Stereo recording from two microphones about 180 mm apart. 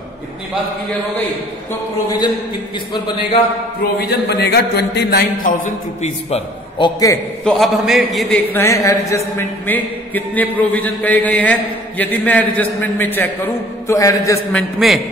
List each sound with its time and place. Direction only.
2.0 s a man's voice: 25° left (ahead or behind)
4.1 s a man's voice: 65° left (ahead or behind)
6.8 s a man's voice: 20° left (ahead or behind)
7.4 s a man's voice: centre (ahead or behind)
8.5 s a man's voice: 15° left (ahead or behind)
14.5 s a man's voice: centre (ahead or behind)